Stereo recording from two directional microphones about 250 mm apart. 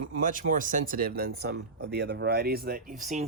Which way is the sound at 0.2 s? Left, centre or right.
Right.